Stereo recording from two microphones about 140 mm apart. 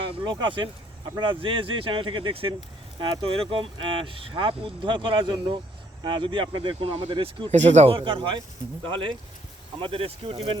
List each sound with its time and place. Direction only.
0.0 s speech: 35° right (ahead or behind)
7.5 s speech: 55° right (ahead or behind)
7.9 s speech: 40° right (ahead or behind)